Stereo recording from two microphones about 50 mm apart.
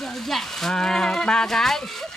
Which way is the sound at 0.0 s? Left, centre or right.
Centre.